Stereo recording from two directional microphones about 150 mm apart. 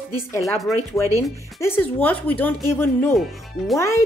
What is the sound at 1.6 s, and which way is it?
Speech, 15° left (ahead or behind).